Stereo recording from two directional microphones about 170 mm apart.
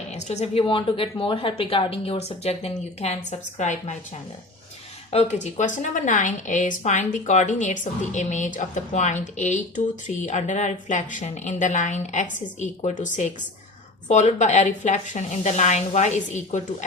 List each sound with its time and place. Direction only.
0.1 s a woman's voice: 40° left (ahead or behind)
5.1 s a woman's voice: 40° left (ahead or behind)